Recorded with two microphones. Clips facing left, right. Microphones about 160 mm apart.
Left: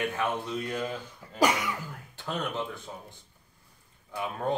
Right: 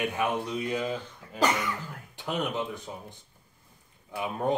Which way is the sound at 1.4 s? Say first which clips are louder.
Left 1 dB; 10° left (ahead or behind).